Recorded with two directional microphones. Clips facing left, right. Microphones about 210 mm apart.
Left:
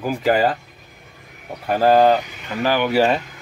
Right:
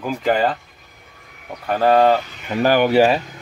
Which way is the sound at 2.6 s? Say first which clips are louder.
Right 4 dB; 45° right (ahead or behind).